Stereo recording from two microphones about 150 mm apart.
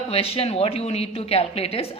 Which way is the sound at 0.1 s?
40° left (ahead or behind).